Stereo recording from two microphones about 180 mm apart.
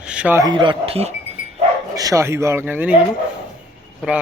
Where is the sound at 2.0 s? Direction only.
15° right (ahead or behind).